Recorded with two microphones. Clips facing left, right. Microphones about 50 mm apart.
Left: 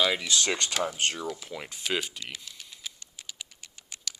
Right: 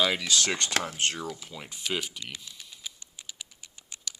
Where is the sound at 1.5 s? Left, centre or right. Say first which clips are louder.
Left 4 dB; left.